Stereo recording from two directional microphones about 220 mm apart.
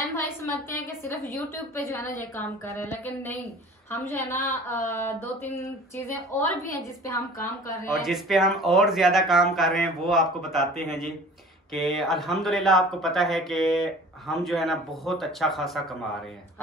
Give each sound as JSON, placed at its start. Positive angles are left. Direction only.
{"t": 0.0, "sound": "a sound", "side_deg": 10}
{"t": 0.8, "sound": "a woman's voice", "side_deg": 10}
{"t": 7.1, "sound": "a woman's voice", "side_deg": 15}
{"t": 7.9, "sound": "speech", "side_deg": 0}
{"t": 10.8, "sound": "speech", "side_deg": 45}
{"t": 11.7, "sound": "speech", "side_deg": 0}